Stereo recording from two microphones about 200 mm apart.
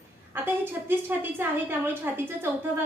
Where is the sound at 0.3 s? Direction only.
10° right (ahead or behind).